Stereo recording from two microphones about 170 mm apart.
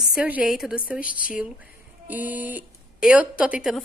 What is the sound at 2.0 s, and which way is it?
Speech, 10° right (ahead or behind).